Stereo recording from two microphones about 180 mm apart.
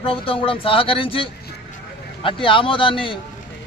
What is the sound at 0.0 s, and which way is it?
Speech, 30° left (ahead or behind).